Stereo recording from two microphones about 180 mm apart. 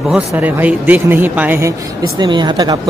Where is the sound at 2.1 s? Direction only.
25° right (ahead or behind).